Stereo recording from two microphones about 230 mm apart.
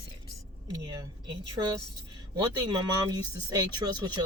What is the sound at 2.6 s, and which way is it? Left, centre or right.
Speech, centre.